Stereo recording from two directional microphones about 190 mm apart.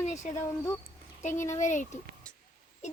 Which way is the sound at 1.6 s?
40° left (ahead or behind).